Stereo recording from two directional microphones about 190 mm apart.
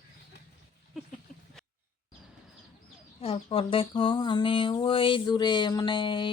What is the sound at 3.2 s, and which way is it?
Speech, 30° left (ahead or behind).